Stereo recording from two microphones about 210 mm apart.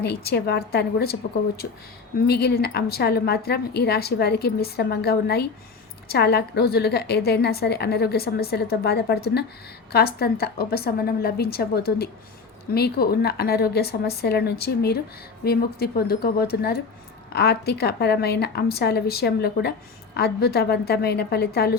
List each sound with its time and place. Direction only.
0.0 s a woman's voice: 50° left (ahead or behind)